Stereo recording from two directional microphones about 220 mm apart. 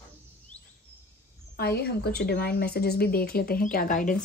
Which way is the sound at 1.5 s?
45° left (ahead or behind).